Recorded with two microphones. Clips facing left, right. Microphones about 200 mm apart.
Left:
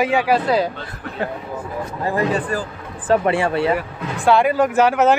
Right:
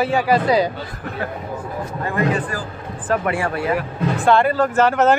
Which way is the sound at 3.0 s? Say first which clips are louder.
Left 4 dB; 25° left (ahead or behind).